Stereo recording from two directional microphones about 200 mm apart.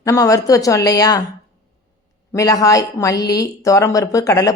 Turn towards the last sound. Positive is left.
turn(degrees=15)  # may be behind; listen again after turning